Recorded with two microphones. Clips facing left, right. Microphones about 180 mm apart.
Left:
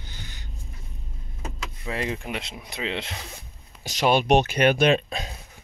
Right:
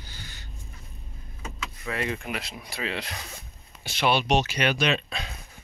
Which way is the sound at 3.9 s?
40° left (ahead or behind).